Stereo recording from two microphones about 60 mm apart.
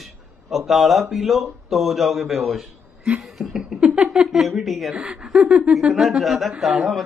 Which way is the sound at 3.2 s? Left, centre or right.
Centre.